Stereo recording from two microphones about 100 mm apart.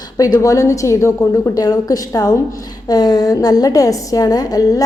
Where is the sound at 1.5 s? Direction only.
40° left (ahead or behind).